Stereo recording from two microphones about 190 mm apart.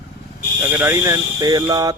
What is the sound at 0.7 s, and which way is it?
Speech, 10° right (ahead or behind).